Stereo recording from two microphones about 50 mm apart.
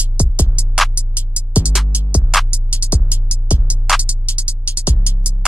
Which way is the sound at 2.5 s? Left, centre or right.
Right.